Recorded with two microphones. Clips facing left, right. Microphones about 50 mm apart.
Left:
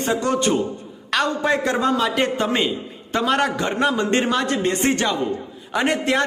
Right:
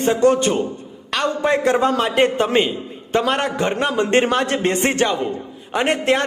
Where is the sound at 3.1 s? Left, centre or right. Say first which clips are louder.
Right 2 dB; right.